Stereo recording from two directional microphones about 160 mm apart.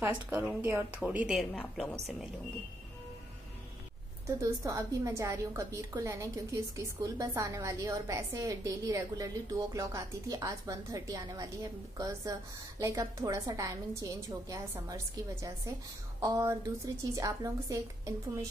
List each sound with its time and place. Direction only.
0.0 s a woman's voice: 10° right (ahead or behind); by 2.0 s 5° left (ahead or behind)
4.4 s a woman's voice: 20° right (ahead or behind)
16.2 s a woman's voice: 20° right (ahead or behind)